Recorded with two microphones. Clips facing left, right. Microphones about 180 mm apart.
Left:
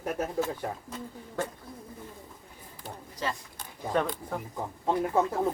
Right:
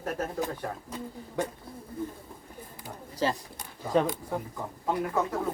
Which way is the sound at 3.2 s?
30° right (ahead or behind).